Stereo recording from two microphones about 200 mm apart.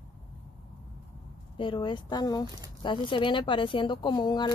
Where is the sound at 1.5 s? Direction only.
25° left (ahead or behind).